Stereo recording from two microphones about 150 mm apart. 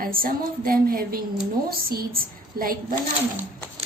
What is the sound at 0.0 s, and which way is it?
A woman's voice, 70° right (ahead or behind).